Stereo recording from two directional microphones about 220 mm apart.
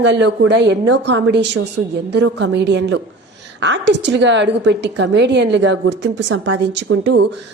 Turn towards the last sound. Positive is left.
turn(degrees=-50)  # may be behind; listen again after turning